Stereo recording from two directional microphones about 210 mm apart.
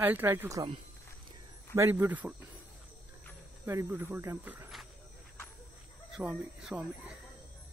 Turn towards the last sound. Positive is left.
turn(degrees=-5)  # may be behind; listen again after turning